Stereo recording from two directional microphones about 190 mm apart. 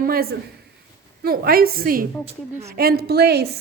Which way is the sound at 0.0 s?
50° right (ahead or behind).